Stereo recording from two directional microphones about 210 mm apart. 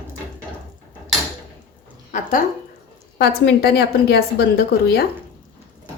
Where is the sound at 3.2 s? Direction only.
50° left (ahead or behind).